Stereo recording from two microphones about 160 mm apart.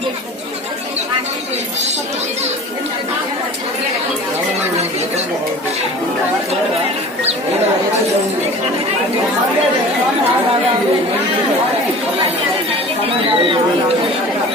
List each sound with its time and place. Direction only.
13.2 s speech: 35° right (ahead or behind)